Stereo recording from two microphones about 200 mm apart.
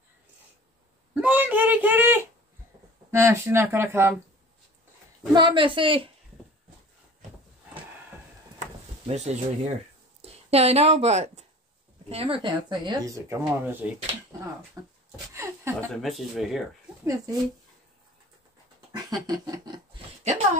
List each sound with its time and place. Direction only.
1.1 s a sound: 10° right (ahead or behind)
3.1 s speech: 10° right (ahead or behind)
5.3 s speech: 25° right (ahead or behind)
9.0 s a woman's voice: 30° right (ahead or behind); by 14.9 s 10° right (ahead or behind)
15.3 s chuckle: 15° right (ahead or behind)
15.9 s speech: centre (ahead or behind)
17.0 s speech: 15° right (ahead or behind)
18.9 s dog: 20° right (ahead or behind)
19.2 s a sound: 20° right (ahead or behind)